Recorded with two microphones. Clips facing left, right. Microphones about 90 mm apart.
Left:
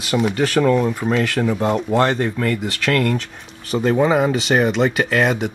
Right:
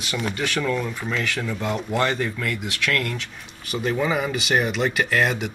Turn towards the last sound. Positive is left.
turn(degrees=0)  # may be behind; listen again after turning